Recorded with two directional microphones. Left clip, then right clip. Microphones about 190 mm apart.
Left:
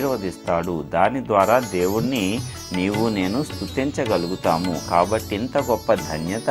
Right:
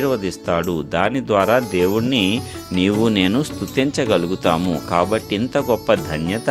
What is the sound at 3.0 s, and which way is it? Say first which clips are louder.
Speech: right 5 dB; 60° right (ahead or behind).